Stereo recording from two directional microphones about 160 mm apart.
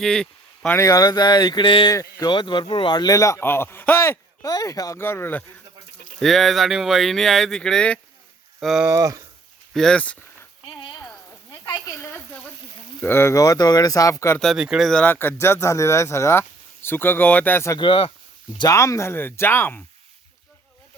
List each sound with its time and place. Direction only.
0.0 s speech: 5° left (ahead or behind)
0.8 s speech: 20° left (ahead or behind)
6.1 s speech: centre (ahead or behind)
8.9 s speech: 20° right (ahead or behind)
9.7 s speech: 5° left (ahead or behind)
11.3 s a sound: 20° left (ahead or behind)
13.0 s speech: 15° left (ahead or behind)
14.3 s speech: centre (ahead or behind)
17.7 s speech: 30° left (ahead or behind); by 19.8 s 15° left (ahead or behind)